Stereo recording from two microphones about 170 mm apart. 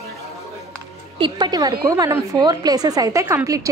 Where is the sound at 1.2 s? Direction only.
25° right (ahead or behind).